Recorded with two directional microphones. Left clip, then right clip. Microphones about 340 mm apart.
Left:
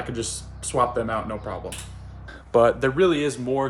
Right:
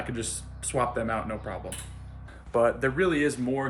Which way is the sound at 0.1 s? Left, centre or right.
Centre.